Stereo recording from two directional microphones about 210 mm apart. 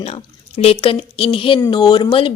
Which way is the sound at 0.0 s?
30° left (ahead or behind).